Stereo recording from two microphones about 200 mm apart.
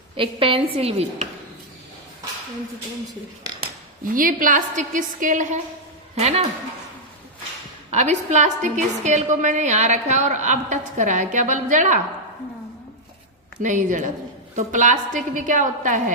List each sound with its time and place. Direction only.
0.2 s a woman's voice: 25° right (ahead or behind)
3.6 s a woman's voice: 45° right (ahead or behind)
7.9 s a woman's voice: 35° right (ahead or behind)
13.6 s a woman's voice: 40° right (ahead or behind)